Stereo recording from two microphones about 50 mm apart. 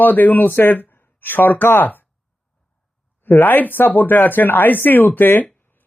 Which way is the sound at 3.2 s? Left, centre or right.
Left.